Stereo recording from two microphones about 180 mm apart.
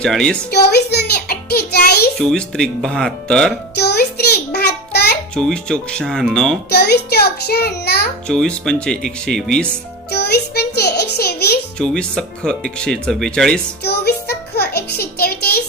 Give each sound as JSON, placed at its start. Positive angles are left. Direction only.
{"t": 0.0, "sound": "speech", "side_deg": 5}
{"t": 0.5, "sound": "child singing", "side_deg": 65}
{"t": 2.1, "sound": "speech", "side_deg": 5}
{"t": 3.8, "sound": "child singing", "side_deg": 65}
{"t": 5.3, "sound": "speech", "side_deg": 5}
{"t": 6.7, "sound": "a sound", "side_deg": 65}
{"t": 8.3, "sound": "speech", "side_deg": 5}
{"t": 10.1, "sound": "music", "side_deg": 65}
{"t": 11.8, "sound": "speech", "side_deg": 5}
{"t": 13.8, "sound": "music", "side_deg": 65}